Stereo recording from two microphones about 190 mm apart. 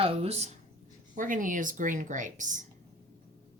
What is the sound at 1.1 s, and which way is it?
Speech, 45° right (ahead or behind).